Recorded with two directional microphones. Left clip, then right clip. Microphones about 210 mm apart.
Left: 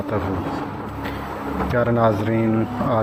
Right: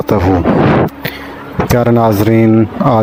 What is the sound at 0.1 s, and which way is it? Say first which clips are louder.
Speech: right 11 dB; 50° right (ahead or behind).